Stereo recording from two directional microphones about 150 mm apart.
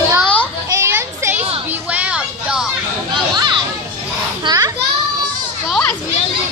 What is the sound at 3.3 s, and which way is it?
Children playing, 30° right (ahead or behind).